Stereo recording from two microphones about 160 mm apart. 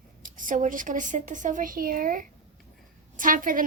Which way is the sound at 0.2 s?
55° right (ahead or behind).